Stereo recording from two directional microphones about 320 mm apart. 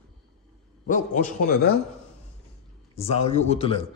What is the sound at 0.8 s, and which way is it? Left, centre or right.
Speech, left.